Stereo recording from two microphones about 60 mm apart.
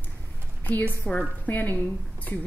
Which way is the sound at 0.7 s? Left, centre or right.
Left.